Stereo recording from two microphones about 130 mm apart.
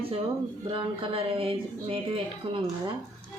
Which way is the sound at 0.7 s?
45° right (ahead or behind).